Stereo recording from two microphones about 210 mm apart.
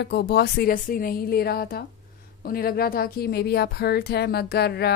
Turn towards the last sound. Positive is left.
turn(degrees=50)  # may be behind; listen again after turning